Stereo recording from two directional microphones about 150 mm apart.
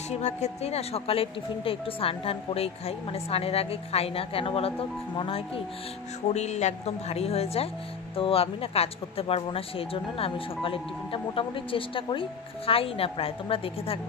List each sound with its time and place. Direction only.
0.2 s speech: 45° left (ahead or behind)
6.3 s speech: 50° left (ahead or behind)